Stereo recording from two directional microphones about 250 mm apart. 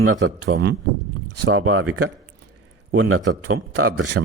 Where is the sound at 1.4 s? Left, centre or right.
Right.